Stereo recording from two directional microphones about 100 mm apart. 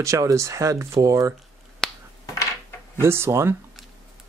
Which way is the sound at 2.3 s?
30° left (ahead or behind).